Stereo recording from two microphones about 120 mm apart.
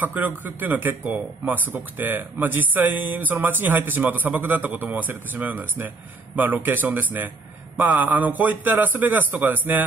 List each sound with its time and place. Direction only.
0.0 s a man's voice: 15° right (ahead or behind)